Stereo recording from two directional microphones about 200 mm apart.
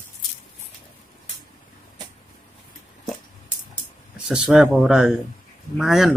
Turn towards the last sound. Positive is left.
turn(degrees=0)  # may be behind; listen again after turning